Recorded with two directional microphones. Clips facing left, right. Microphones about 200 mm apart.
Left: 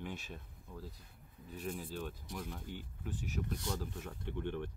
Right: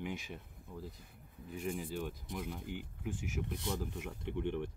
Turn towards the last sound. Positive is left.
turn(degrees=-15)  # may be behind; listen again after turning